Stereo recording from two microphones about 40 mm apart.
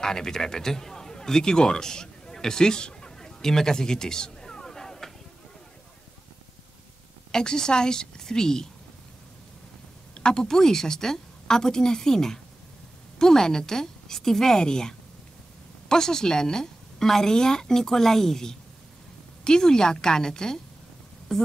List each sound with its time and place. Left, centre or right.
0.0 s speech: centre
7.2 s a woman's voice: centre
10.1 s a woman's voice: centre